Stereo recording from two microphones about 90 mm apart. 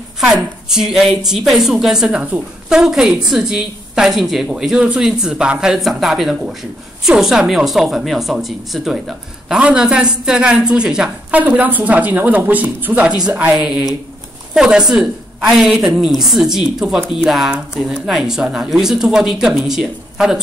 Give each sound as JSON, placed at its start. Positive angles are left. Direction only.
{"t": 0.2, "sound": "a woman's voice", "side_deg": -5}
{"t": 9.5, "sound": "a woman's voice", "side_deg": -10}
{"t": 11.3, "sound": "a woman's voice", "side_deg": -20}
{"t": 13.6, "sound": "a woman's voice", "side_deg": -5}